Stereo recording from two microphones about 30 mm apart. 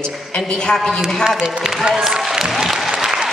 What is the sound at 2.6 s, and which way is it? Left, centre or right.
Applause, centre.